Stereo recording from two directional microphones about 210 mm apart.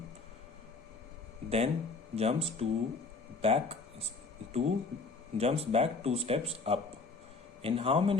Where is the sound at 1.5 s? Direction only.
30° right (ahead or behind).